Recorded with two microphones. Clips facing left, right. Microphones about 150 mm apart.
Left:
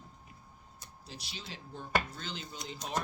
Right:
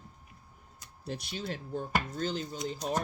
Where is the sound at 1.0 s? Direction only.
55° right (ahead or behind).